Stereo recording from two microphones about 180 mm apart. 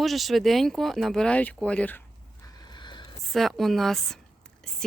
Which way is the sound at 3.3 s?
Centre (ahead or behind).